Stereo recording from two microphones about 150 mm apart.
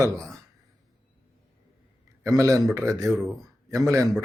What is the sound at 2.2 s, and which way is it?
Speech, 20° right (ahead or behind).